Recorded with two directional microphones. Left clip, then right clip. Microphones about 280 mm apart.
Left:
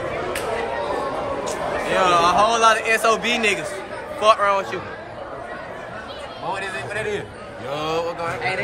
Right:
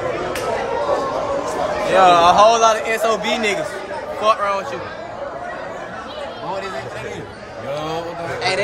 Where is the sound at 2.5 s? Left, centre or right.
Centre.